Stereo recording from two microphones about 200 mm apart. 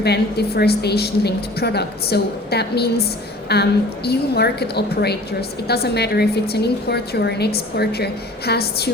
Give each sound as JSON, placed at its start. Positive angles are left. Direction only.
{"t": 0.0, "sound": "a woman's voice", "side_deg": 55}